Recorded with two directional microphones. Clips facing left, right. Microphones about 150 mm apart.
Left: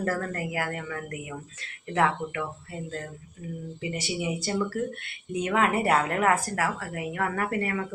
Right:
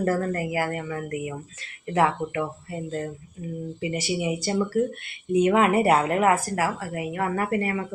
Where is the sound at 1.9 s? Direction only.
15° right (ahead or behind).